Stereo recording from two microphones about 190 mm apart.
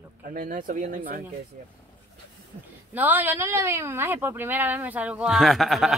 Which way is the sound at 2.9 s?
10° right (ahead or behind).